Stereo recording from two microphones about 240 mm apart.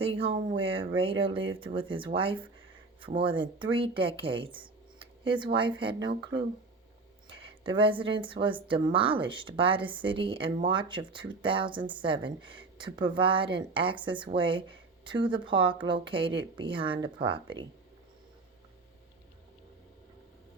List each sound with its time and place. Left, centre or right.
0.0 s speech: right